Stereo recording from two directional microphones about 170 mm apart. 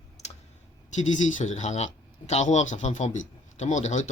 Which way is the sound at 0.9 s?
45° left (ahead or behind).